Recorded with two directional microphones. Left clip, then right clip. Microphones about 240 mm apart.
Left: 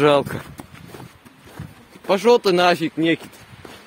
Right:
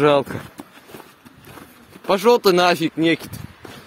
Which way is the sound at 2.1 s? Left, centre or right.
Centre.